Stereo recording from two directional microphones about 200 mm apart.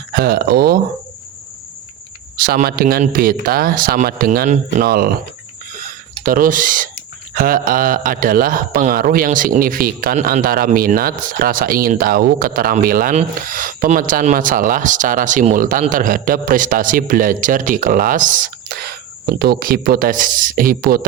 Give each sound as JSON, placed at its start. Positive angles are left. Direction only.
{"t": 0.1, "sound": "speech", "side_deg": -45}
{"t": 2.4, "sound": "speech", "side_deg": -50}
{"t": 6.2, "sound": "speech", "side_deg": -45}